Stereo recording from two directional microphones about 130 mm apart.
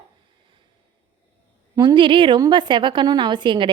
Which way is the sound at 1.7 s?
35° right (ahead or behind).